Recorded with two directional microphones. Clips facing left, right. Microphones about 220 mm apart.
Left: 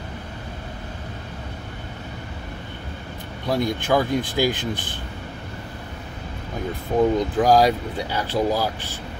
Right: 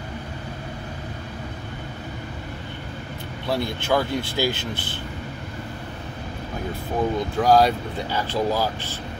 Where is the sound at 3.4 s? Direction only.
15° left (ahead or behind).